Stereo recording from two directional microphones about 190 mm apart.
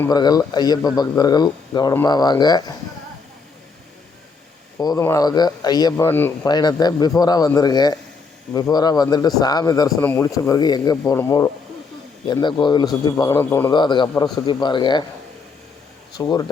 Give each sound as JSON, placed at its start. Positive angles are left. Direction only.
{"t": 0.1, "sound": "speech", "side_deg": 20}
{"t": 4.8, "sound": "speech", "side_deg": 20}
{"t": 6.5, "sound": "speech", "side_deg": 20}
{"t": 13.4, "sound": "speech", "side_deg": 10}
{"t": 13.7, "sound": "speech", "side_deg": 25}
{"t": 16.1, "sound": "speech", "side_deg": 20}